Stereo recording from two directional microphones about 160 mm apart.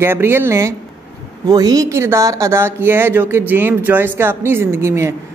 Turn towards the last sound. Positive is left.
turn(degrees=-15)  # may be behind; listen again after turning